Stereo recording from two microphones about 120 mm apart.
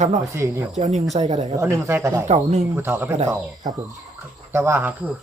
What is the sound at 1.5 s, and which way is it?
Speech, 20° right (ahead or behind).